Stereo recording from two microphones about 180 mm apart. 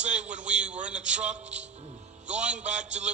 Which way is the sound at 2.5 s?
40° right (ahead or behind).